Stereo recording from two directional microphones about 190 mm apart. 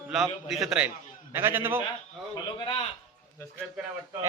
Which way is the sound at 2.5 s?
25° left (ahead or behind).